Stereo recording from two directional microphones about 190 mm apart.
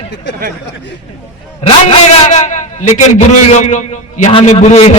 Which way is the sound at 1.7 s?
35° left (ahead or behind).